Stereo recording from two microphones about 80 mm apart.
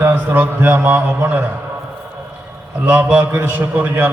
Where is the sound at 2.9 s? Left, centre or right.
Centre.